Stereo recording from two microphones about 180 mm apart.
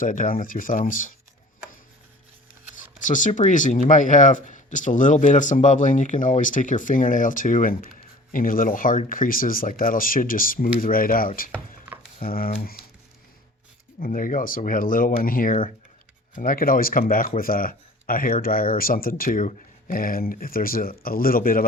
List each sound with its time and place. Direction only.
0.0 s speech: 45° left (ahead or behind)
3.0 s speech: 45° left (ahead or behind)
14.0 s speech: 50° left (ahead or behind)